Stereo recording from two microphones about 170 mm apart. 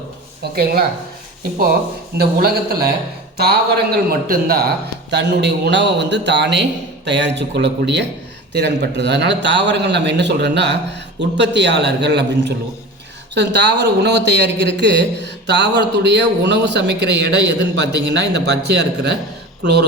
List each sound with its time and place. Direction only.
0.5 s a man's voice: 65° right (ahead or behind)
2.1 s a man's voice: 65° right (ahead or behind)
5.1 s speech: 90° right